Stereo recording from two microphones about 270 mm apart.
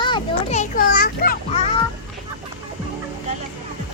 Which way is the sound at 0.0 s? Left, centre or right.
Left.